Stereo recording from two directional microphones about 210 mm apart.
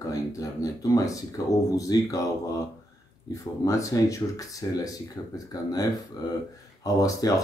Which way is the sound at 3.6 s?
15° left (ahead or behind).